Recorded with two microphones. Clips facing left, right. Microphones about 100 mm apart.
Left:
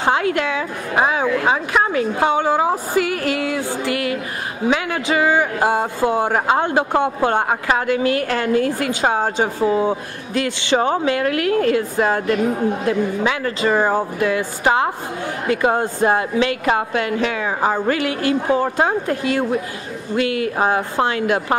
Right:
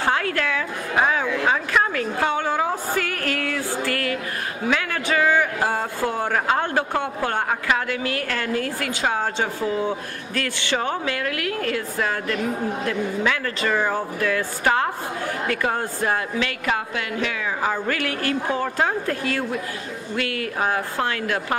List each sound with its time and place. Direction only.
0.0 s a woman's voice: 20° left (ahead or behind)